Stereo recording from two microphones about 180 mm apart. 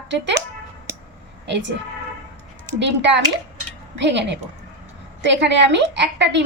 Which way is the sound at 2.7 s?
75° right (ahead or behind).